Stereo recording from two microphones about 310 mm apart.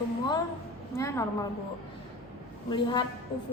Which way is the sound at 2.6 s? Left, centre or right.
Centre.